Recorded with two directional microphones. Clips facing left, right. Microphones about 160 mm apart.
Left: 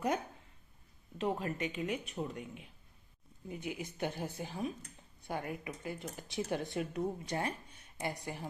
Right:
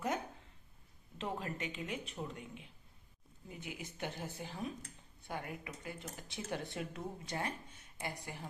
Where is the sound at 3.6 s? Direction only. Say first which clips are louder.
Left 5 dB; 20° left (ahead or behind).